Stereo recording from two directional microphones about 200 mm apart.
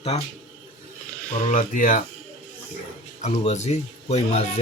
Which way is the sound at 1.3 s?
40° left (ahead or behind).